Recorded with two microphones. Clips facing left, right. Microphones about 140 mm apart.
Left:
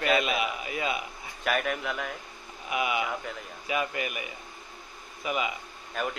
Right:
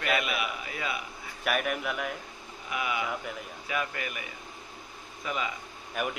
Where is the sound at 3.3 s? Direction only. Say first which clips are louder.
Even; 5° right (ahead or behind).